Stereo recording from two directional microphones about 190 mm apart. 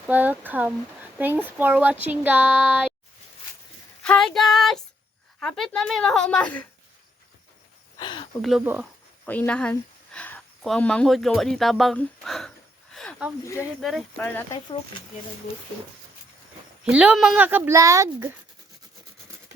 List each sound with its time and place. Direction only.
0.1 s speech: 10° right (ahead or behind)
4.0 s speech: 5° left (ahead or behind)
7.9 s speech: 25° left (ahead or behind)
8.4 s speech: centre (ahead or behind)
9.2 s speech: 10° left (ahead or behind)
12.9 s a sound: centre (ahead or behind)
13.4 s speech: 15° left (ahead or behind)
13.8 s speech: 5° left (ahead or behind)
16.8 s speech: 5° right (ahead or behind)